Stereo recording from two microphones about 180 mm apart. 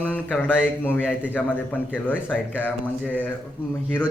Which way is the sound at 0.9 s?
10° left (ahead or behind).